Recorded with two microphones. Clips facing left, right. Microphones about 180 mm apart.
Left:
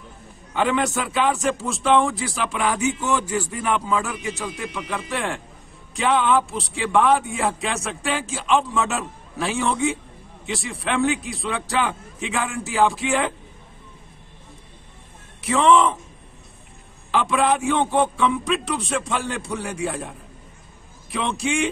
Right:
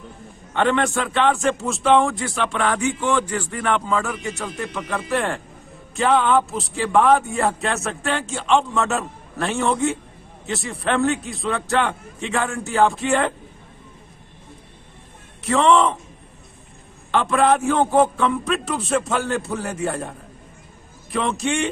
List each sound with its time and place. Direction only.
0.6 s speech: centre (ahead or behind)
15.4 s speech: centre (ahead or behind)
17.1 s speech: centre (ahead or behind)